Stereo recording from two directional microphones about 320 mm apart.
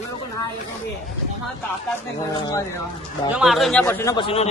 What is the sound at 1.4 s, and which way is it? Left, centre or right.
A man's voice, centre.